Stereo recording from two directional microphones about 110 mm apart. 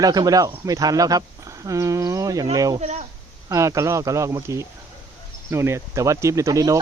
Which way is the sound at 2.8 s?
90° right.